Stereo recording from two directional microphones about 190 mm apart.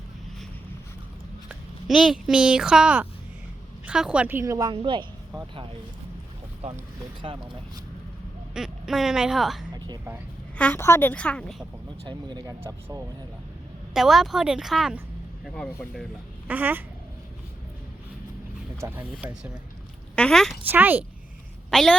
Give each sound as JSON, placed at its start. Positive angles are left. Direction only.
{"t": 1.5, "sound": "a woman's voice", "side_deg": 0}
{"t": 7.2, "sound": "speech", "side_deg": -30}
{"t": 8.5, "sound": "speech", "side_deg": 0}
{"t": 9.7, "sound": "a sound", "side_deg": -20}
{"t": 10.6, "sound": "a woman's voice", "side_deg": 10}
{"t": 12.0, "sound": "a woman's voice", "side_deg": -20}
{"t": 13.9, "sound": "speech", "side_deg": 0}
{"t": 16.5, "sound": "a woman's voice", "side_deg": -10}
{"t": 18.8, "sound": "a woman's voice", "side_deg": -10}